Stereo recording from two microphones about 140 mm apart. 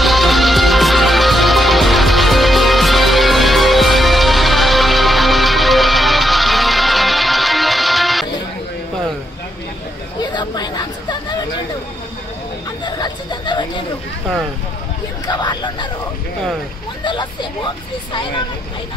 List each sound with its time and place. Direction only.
0.0 s music: centre (ahead or behind)
10.3 s chatter: 30° left (ahead or behind)
12.8 s chatter: 30° left (ahead or behind)
15.2 s hubbub: 30° left (ahead or behind)
17.0 s vehicle: 35° left (ahead or behind)